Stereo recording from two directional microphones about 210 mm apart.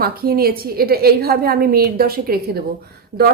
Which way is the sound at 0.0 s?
45° right (ahead or behind).